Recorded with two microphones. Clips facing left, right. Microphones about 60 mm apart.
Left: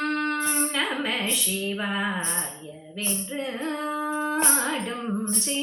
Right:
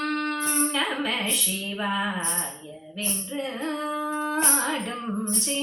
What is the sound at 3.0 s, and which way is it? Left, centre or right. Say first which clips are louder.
Music: even; left.